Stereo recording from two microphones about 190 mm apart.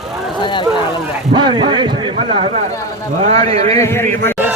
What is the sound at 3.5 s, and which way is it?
Speech, 35° right (ahead or behind).